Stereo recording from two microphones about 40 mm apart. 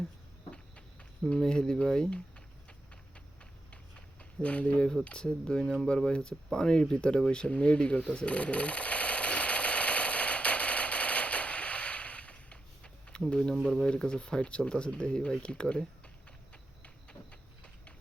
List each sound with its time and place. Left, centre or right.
0.5 s a sound: left
4.4 s speech: left
8.1 s a sound: left
13.5 s speech: centre
13.8 s speech: left
16.5 s clip-clop: left